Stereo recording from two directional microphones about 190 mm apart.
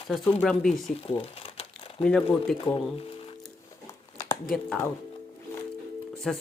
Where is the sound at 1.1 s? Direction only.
30° left (ahead or behind).